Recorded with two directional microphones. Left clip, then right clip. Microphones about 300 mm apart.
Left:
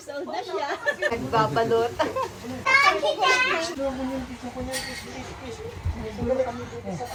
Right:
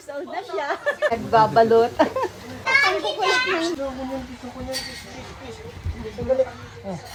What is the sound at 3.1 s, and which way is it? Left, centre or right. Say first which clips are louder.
Speech: right 1 dB; right.